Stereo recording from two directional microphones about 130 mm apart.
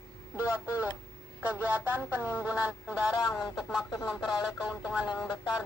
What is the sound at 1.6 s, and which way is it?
Speech, 15° right (ahead or behind).